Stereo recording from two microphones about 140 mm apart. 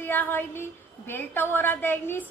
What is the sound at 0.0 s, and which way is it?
A woman's voice, 15° left (ahead or behind).